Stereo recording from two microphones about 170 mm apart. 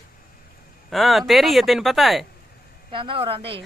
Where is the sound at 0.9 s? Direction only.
Centre (ahead or behind).